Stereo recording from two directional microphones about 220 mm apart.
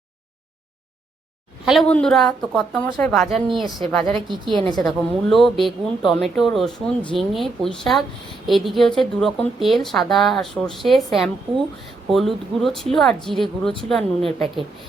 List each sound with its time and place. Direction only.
1.6 s speech: centre (ahead or behind)
4.4 s a woman's voice: 20° right (ahead or behind)
4.8 s speech: centre (ahead or behind)